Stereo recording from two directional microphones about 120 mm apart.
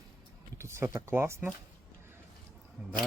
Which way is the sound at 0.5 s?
20° right (ahead or behind).